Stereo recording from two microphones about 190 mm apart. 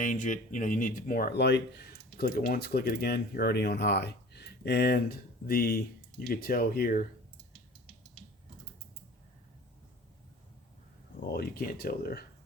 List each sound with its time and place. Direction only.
0.0 s speech: 40° left (ahead or behind)
11.3 s speech: 50° left (ahead or behind)